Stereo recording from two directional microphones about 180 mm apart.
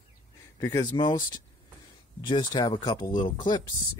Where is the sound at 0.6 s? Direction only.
20° left (ahead or behind).